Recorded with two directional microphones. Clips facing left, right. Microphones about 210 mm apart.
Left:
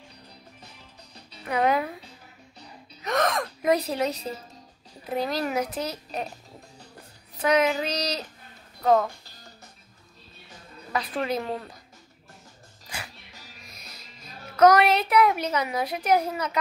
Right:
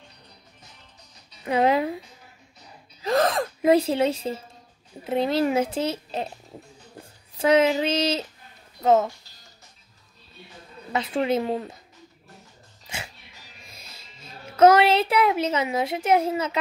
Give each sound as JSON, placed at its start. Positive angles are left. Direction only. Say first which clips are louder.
{"t": 1.4, "sound": "speech", "louder": "right 3 dB", "side_deg": -25}
{"t": 3.0, "sound": "gasp", "louder": "right 4 dB", "side_deg": -30}
{"t": 3.6, "sound": "a child's voice", "louder": "right 5 dB", "side_deg": -30}
{"t": 7.3, "sound": "a child's voice", "louder": "right 4 dB", "side_deg": -25}
{"t": 10.9, "sound": "a child's voice", "louder": "right 4 dB", "side_deg": -25}
{"t": 12.8, "sound": "music", "louder": "right 2 dB", "side_deg": -25}